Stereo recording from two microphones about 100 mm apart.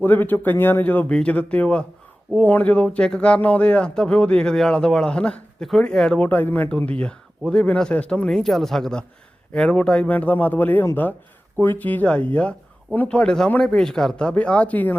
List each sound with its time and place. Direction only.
0.0 s speech: 20° left (ahead or behind)